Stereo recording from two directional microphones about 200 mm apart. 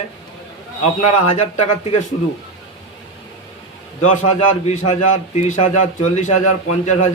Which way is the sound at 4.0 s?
35° left (ahead or behind).